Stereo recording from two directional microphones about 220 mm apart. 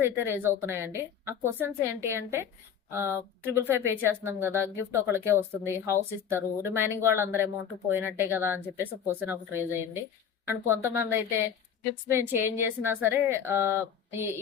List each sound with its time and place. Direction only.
0.0 s speech: 10° right (ahead or behind)